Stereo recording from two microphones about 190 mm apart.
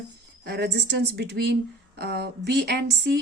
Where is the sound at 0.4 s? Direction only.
60° right (ahead or behind).